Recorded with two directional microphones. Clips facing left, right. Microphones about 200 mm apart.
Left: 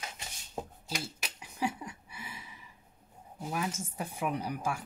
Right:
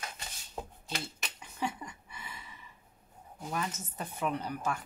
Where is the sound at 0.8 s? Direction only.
5° left (ahead or behind).